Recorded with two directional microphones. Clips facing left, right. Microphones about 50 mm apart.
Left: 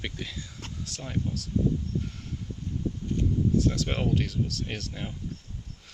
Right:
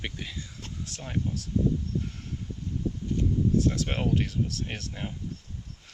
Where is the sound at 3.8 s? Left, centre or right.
Centre.